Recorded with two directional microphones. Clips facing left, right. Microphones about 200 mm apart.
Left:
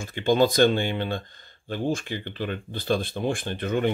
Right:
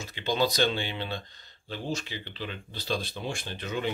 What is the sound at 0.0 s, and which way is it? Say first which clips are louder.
Speech: left 7 dB; 50° left (ahead or behind).